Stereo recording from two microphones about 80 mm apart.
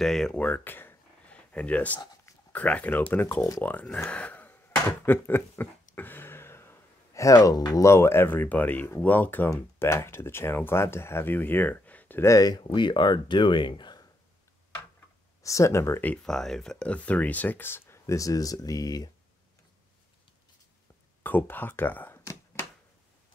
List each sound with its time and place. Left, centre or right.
0.0 s speech: centre
0.4 s a sound: left
2.5 s speech: centre
3.3 s speech: left
3.6 s speech: centre
4.1 s a sound: centre; by 7.6 s left
7.8 s speech: left; by 12.2 s centre
12.2 s speech: left
12.6 s speech: left
15.4 s speech: left
16.2 s speech: centre; by 19.0 s left
21.2 s speech: left
22.2 s a sound: left